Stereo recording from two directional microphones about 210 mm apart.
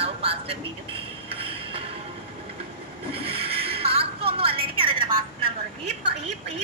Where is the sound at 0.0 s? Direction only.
25° right (ahead or behind).